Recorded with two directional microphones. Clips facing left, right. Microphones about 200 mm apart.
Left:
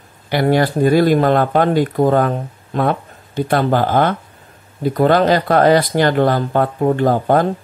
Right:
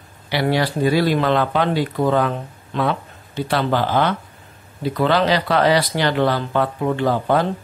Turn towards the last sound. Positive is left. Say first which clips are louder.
# left 4 dB
turn(degrees=45)  # may be behind; listen again after turning